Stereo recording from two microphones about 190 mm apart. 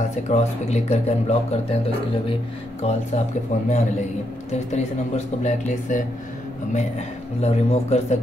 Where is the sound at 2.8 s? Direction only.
30° left (ahead or behind).